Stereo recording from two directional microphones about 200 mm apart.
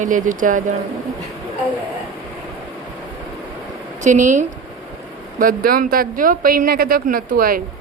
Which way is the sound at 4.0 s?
40° right (ahead or behind).